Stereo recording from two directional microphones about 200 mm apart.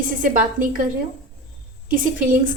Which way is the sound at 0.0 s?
40° right (ahead or behind).